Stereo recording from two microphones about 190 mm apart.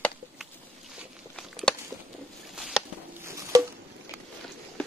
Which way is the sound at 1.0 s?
Centre (ahead or behind).